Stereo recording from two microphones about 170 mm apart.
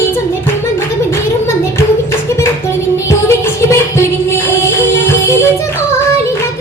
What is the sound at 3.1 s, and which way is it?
Music, 15° left (ahead or behind).